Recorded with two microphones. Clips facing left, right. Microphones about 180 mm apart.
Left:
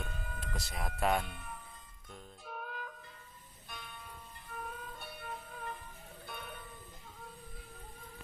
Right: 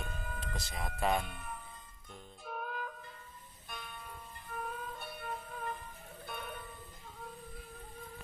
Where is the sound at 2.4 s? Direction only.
55° right (ahead or behind).